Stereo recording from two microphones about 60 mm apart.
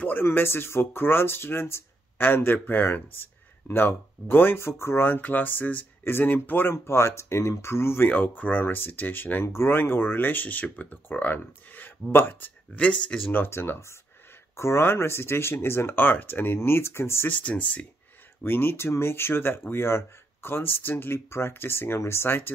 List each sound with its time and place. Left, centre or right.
0.0 s speech: left
5.0 s speech: left
8.1 s speech: left
12.7 s speech: centre
13.3 s speech: left
17.3 s speech: left
18.4 s speech: left